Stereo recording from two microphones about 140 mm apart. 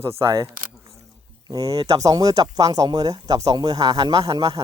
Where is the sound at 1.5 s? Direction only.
25° right (ahead or behind).